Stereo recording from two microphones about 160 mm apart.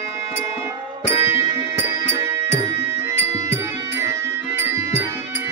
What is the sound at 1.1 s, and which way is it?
Music, 15° right (ahead or behind).